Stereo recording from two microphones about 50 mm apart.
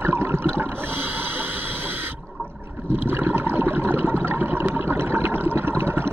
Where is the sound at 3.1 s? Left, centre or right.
Right.